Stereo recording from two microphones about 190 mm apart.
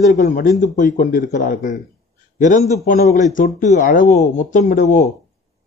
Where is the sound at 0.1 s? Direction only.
45° left (ahead or behind).